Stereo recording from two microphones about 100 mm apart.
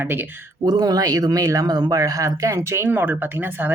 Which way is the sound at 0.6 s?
40° right (ahead or behind).